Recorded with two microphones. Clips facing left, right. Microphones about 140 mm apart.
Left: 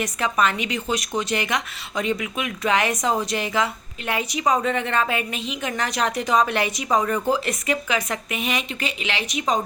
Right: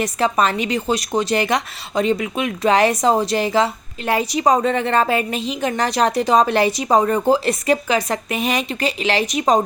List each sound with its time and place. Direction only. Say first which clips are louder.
0.0 s a woman's voice: right 4 dB; 35° right (ahead or behind)